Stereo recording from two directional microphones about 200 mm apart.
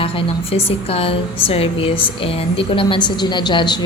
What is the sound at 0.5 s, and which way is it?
A woman's voice, 30° left (ahead or behind).